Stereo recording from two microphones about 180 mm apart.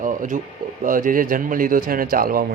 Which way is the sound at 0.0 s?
45° right (ahead or behind).